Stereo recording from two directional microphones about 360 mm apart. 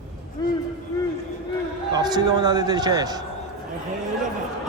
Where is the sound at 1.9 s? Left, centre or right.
Centre.